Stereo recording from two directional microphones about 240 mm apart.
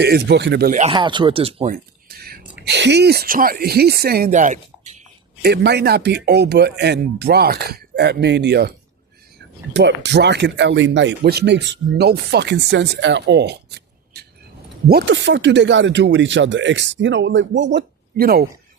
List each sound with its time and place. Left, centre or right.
0.0 s speech: right
0.9 s speech: centre
1.7 s a sound: right
2.6 s speech: right
5.4 s speech: right
9.7 s speech: right